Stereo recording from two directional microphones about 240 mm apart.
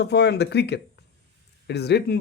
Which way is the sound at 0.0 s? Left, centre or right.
Left.